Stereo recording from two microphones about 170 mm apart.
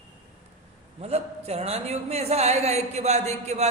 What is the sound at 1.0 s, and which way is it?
A man's voice, 40° right (ahead or behind).